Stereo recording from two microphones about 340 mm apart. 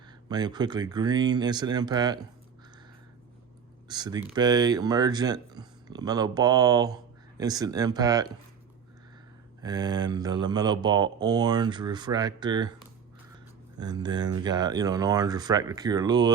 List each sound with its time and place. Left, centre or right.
0.3 s speech: centre
3.8 s speech: centre
9.6 s speech: centre
13.7 s speech: centre